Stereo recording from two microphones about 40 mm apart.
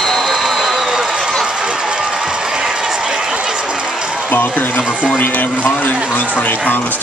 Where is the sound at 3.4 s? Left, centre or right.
Centre.